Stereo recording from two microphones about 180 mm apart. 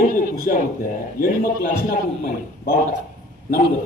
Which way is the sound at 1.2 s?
55° left (ahead or behind).